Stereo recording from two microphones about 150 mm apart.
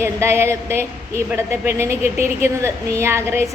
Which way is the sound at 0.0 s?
15° right (ahead or behind).